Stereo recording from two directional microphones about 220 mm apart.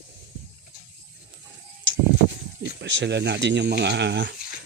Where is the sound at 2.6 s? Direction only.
55° right (ahead or behind).